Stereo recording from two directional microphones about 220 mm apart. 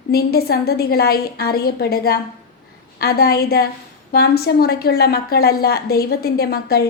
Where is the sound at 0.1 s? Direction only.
45° left (ahead or behind).